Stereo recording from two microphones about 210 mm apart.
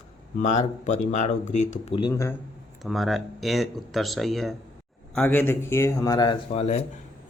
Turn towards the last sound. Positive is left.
turn(degrees=30)  # may be behind; listen again after turning